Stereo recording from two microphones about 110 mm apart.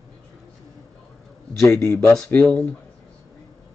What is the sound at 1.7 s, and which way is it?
Speech, 20° left (ahead or behind).